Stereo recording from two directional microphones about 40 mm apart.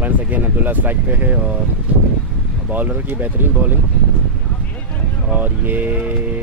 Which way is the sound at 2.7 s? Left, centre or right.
Right.